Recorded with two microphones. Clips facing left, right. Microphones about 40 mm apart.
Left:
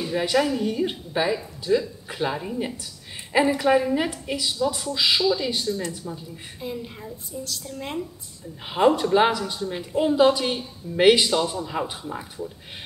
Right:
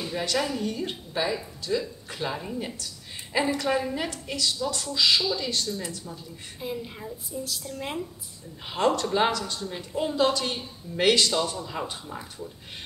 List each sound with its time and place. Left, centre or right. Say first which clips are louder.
0.0 s a woman's voice: left 5 dB; centre
6.6 s a woman's voice: left 1 dB; centre
8.6 s a woman's voice: left 5 dB; centre